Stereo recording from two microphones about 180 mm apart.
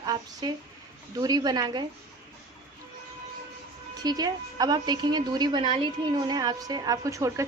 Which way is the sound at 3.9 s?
20° right (ahead or behind).